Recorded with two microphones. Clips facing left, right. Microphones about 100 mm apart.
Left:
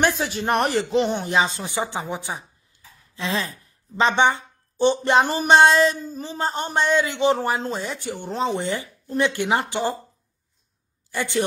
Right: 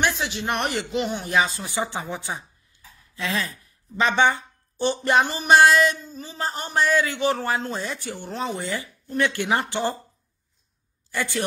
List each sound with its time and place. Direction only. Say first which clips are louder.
0.0 s speech: left 3 dB; 40° left (ahead or behind); by 2.4 s 15° left (ahead or behind)
3.2 s speech: left 1 dB; 30° left (ahead or behind)
11.1 s a man's voice: left 3 dB; 20° left (ahead or behind)